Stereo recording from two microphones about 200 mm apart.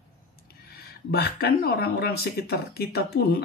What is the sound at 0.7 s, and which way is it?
Speech, 55° left (ahead or behind).